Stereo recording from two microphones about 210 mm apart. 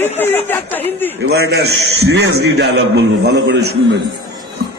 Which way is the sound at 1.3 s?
50° right (ahead or behind).